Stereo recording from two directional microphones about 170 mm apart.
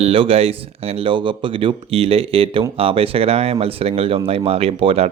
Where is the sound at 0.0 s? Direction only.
35° right (ahead or behind).